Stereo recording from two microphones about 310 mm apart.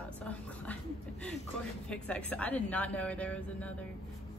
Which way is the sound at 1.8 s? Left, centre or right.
Centre.